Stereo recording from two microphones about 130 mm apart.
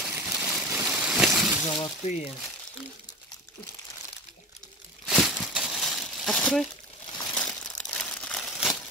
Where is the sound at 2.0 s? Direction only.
50° left (ahead or behind).